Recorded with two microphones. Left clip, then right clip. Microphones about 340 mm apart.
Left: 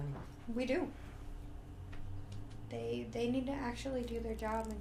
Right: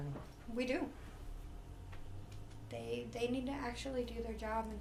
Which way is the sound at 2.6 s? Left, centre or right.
Left.